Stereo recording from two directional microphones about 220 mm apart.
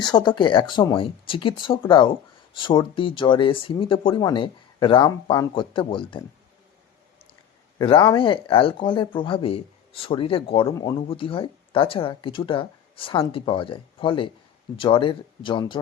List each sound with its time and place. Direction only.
0.0 s speech: 20° left (ahead or behind)
7.9 s speech: 25° left (ahead or behind)